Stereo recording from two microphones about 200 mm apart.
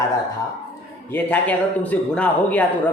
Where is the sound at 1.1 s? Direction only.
10° left (ahead or behind).